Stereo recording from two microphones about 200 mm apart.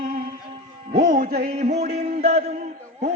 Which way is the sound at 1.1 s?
50° right (ahead or behind).